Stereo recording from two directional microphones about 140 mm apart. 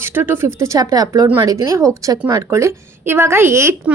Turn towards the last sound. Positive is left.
turn(degrees=-20)  # may be behind; listen again after turning